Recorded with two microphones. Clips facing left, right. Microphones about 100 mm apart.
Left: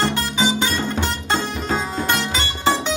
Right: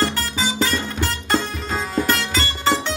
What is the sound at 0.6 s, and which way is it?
Music, 25° left (ahead or behind).